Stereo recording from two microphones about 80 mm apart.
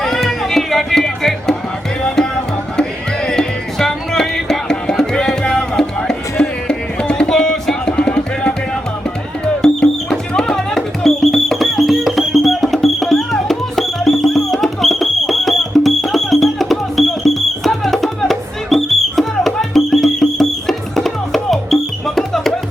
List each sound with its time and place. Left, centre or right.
0.0 s music: centre
3.2 s music: centre
9.6 s music: centre